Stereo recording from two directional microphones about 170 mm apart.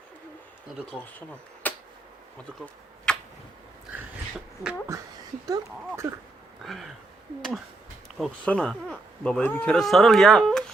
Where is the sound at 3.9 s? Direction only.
5° right (ahead or behind).